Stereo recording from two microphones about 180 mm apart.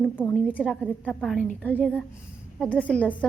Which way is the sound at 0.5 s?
5° left (ahead or behind).